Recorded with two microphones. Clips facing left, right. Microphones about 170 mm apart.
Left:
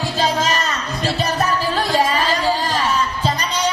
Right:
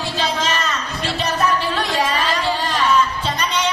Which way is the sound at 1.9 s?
40° left (ahead or behind).